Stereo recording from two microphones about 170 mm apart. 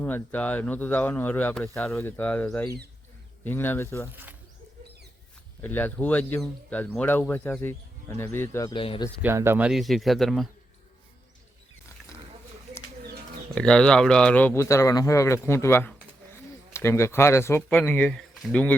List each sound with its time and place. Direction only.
0.0 s speech: 10° left (ahead or behind)
4.1 s speech: 10° right (ahead or behind)
5.6 s speech: 10° left (ahead or behind)
8.7 s speech: 30° left (ahead or behind)
9.2 s speech: 15° right (ahead or behind); by 10.5 s centre (ahead or behind)
13.5 s speech: 5° left (ahead or behind)